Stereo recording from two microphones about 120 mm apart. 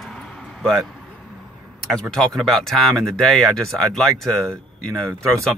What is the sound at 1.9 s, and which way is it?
Speech, 5° left (ahead or behind).